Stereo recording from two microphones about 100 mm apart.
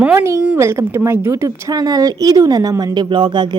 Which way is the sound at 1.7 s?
40° right (ahead or behind).